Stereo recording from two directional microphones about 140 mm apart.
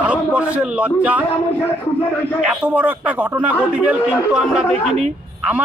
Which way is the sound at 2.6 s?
10° right (ahead or behind).